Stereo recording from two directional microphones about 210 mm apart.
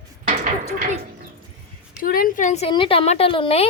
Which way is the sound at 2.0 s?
45° left (ahead or behind).